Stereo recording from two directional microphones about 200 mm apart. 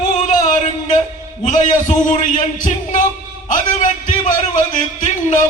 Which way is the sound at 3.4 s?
40° left (ahead or behind).